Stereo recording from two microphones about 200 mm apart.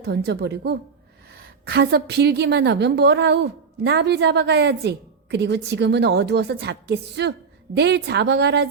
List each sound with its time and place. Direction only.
0.0 s a woman's voice: 55° right (ahead or behind)